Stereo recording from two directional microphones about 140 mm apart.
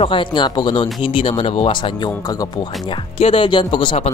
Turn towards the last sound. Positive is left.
turn(degrees=35)  # may be behind; listen again after turning